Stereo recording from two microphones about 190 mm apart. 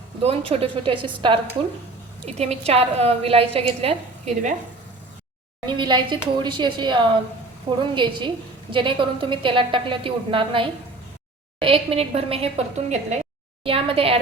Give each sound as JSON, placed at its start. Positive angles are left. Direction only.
{"t": 0.2, "sound": "a woman's voice", "side_deg": -30}
{"t": 5.6, "sound": "a woman's voice", "side_deg": -25}